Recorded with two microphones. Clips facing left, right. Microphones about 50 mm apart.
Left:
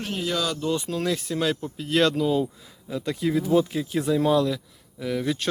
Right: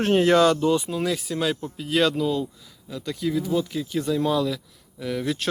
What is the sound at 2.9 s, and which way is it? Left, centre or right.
Speech, left.